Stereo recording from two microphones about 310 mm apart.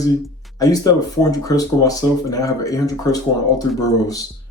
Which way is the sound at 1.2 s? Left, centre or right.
Centre.